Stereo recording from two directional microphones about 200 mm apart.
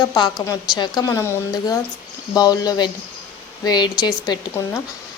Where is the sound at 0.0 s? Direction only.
20° left (ahead or behind).